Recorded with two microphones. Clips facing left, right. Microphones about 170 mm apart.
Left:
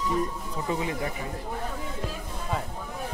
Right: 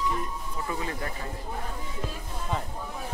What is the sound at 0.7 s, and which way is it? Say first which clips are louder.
Speech: left 5 dB; 20° left (ahead or behind).